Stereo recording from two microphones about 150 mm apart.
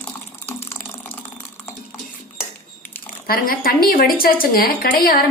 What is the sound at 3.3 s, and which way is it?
A woman's voice, 75° left (ahead or behind).